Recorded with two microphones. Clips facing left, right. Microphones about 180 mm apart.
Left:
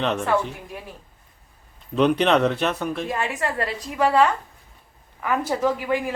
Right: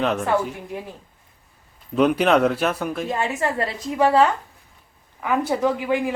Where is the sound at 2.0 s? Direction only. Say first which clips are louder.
Right 1 dB; 5° right (ahead or behind).